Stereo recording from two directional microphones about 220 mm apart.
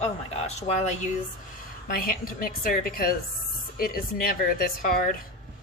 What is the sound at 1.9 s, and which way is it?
A woman's voice, 40° left (ahead or behind).